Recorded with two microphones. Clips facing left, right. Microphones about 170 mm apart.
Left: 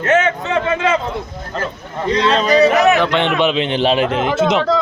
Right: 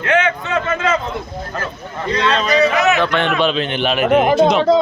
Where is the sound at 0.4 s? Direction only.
15° left (ahead or behind).